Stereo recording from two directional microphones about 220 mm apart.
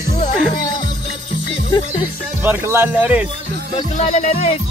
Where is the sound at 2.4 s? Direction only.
10° right (ahead or behind).